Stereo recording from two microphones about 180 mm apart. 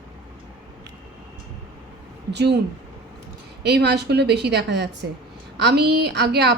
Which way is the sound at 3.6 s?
65° right (ahead or behind).